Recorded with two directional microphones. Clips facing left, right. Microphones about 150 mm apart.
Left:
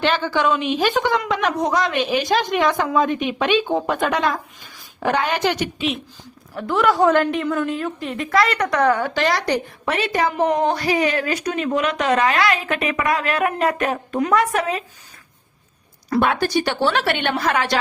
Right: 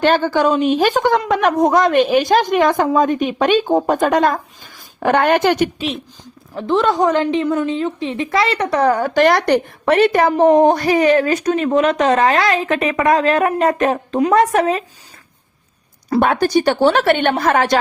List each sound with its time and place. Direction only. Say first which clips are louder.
0.0 s speech: right 5 dB; 45° right (ahead or behind)
6.6 s a woman's voice: right 2 dB; 20° right (ahead or behind); by 13.7 s 40° right (ahead or behind)
14.1 s a woman's voice: right 4 dB; 25° right (ahead or behind)
14.3 s speech: right 5 dB; 45° right (ahead or behind)
16.2 s speech: right 6 dB; 45° right (ahead or behind)